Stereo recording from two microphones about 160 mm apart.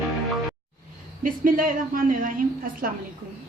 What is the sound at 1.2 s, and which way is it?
A woman's voice, 60° right (ahead or behind).